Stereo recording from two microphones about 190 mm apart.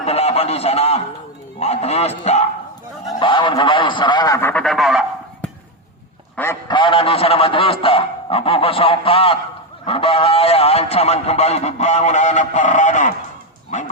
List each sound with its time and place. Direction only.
0.0 s a sound: 30° left (ahead or behind)
1.5 s a man's voice: 35° left (ahead or behind)
3.2 s a man's voice: 25° left (ahead or behind); by 5.5 s centre (ahead or behind)
6.3 s a man's voice: 10° left (ahead or behind)
6.7 s a man's voice: 25° left (ahead or behind)